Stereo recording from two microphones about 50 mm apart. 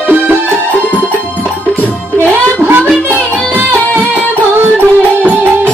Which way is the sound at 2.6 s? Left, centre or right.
Right.